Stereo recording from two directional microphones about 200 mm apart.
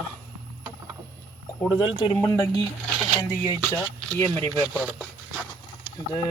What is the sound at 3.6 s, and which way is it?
Speech, 5° left (ahead or behind).